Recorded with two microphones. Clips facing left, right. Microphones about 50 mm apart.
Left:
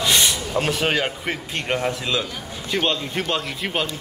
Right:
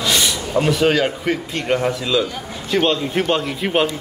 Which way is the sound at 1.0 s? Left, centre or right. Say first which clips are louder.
Right 6 dB; centre.